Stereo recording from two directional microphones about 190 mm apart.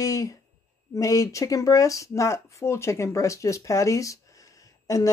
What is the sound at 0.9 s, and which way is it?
Speech, 15° left (ahead or behind).